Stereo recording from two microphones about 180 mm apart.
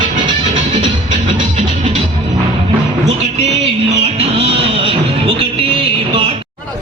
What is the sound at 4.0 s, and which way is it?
Music, 35° right (ahead or behind).